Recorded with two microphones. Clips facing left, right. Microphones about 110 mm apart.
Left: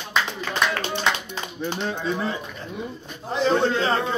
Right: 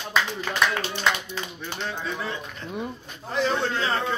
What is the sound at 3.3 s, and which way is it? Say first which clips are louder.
Speech: left 4 dB; 25° left (ahead or behind).